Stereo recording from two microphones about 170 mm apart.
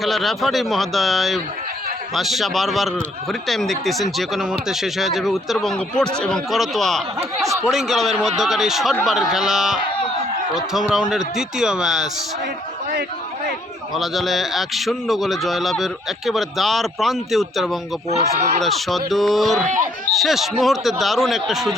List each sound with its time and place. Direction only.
0.0 s a man's voice: centre (ahead or behind)
7.2 s speech: 20° right (ahead or behind)
7.6 s a man's voice: centre (ahead or behind)
9.9 s a sound: 30° left (ahead or behind)
10.5 s a man's voice: 5° right (ahead or behind)
13.9 s a man's voice: centre (ahead or behind)
18.3 s speech: 40° right (ahead or behind)
18.6 s a man's voice: centre (ahead or behind)